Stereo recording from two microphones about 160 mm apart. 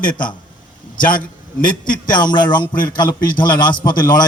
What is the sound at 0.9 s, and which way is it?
A man's voice, 60° left (ahead or behind).